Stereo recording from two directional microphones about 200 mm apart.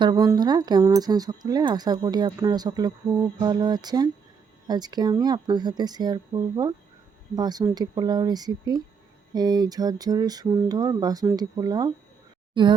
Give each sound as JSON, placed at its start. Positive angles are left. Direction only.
{"t": 0.0, "sound": "speech", "side_deg": -20}